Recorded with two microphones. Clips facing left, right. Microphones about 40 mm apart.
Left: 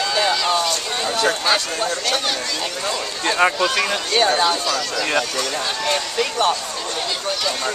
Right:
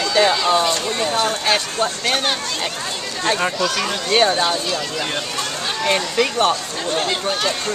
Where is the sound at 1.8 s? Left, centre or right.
Right.